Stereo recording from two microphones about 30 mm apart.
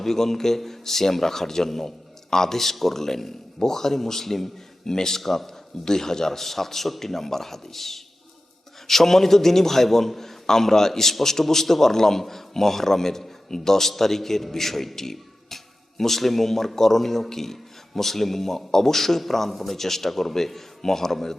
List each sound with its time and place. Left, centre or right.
0.0 s a man's voice: centre
5.2 s a man's voice: centre
5.8 s a man's voice: centre